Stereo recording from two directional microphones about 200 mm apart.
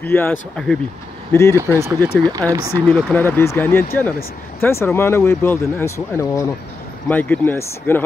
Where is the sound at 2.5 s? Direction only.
15° right (ahead or behind).